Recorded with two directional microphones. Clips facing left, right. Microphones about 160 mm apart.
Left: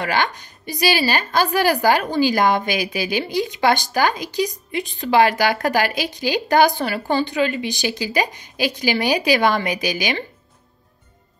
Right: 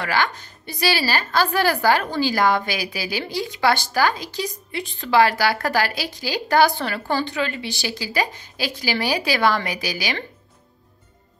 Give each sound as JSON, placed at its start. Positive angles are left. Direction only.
{"t": 0.0, "sound": "a woman's voice", "side_deg": 20}